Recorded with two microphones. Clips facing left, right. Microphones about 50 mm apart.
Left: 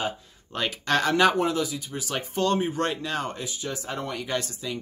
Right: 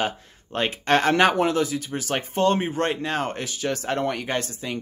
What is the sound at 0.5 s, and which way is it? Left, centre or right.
Speech, right.